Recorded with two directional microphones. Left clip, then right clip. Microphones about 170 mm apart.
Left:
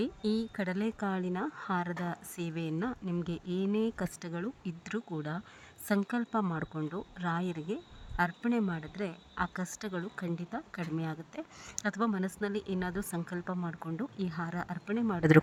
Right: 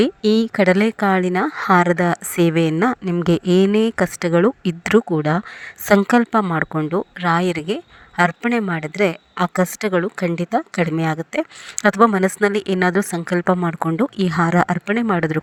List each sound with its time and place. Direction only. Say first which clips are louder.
0.0 s a woman's voice: right 17 dB; 40° right (ahead or behind)
0.9 s a woman's voice: right 17 dB; 20° right (ahead or behind)
14.8 s speech: right 15 dB; 25° right (ahead or behind)